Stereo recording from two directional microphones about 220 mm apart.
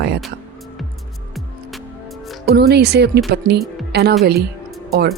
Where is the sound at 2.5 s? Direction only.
45° right (ahead or behind).